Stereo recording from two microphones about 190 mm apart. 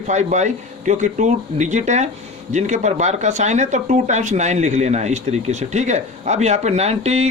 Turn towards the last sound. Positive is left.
turn(degrees=-35)  # may be behind; listen again after turning